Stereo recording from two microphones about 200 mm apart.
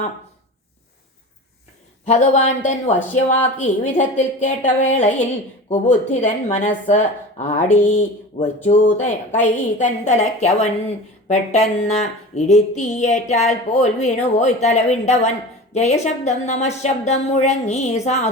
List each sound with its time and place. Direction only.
2.0 s speech: 35° left (ahead or behind)
8.6 s speech: 40° left (ahead or behind)